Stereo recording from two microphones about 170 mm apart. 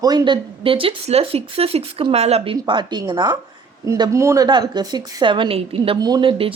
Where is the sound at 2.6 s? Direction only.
25° right (ahead or behind).